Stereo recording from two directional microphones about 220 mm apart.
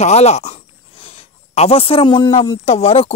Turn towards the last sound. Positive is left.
turn(degrees=25)  # may be behind; listen again after turning